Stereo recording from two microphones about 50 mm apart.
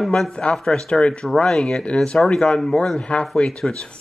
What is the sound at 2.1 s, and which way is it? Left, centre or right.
Speech, left.